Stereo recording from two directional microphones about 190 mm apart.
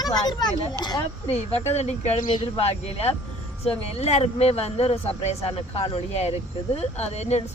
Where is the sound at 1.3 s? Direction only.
35° left (ahead or behind).